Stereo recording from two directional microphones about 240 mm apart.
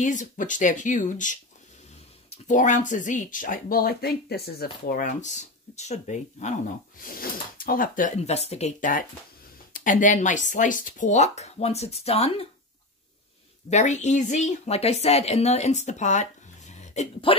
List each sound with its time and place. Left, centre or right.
0.0 s speech: left
13.7 s speech: left